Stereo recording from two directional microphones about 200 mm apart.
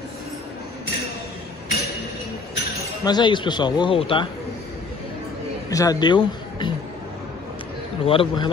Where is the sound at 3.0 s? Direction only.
20° left (ahead or behind).